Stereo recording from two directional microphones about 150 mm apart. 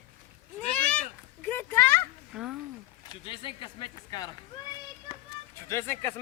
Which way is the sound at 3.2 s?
35° left (ahead or behind).